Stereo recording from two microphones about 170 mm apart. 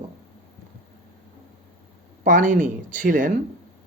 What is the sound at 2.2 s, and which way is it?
A man's voice, 50° right (ahead or behind).